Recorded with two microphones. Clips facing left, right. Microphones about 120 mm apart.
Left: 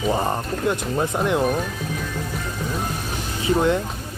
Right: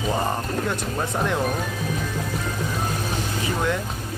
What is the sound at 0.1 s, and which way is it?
Speech, 10° left (ahead or behind).